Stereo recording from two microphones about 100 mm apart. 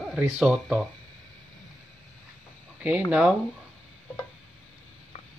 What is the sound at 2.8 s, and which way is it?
Speech, 15° right (ahead or behind).